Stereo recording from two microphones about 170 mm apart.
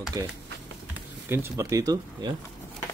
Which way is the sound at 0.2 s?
20° right (ahead or behind).